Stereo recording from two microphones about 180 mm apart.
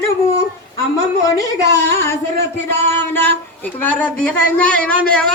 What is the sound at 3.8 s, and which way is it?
A man's voice, 5° left (ahead or behind).